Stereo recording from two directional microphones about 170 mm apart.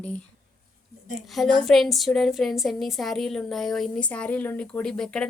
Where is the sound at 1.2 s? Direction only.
Centre (ahead or behind).